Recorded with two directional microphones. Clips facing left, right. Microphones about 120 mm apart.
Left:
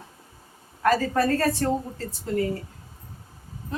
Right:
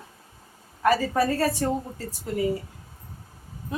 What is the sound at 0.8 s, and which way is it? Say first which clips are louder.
Speech: even; 10° right (ahead or behind).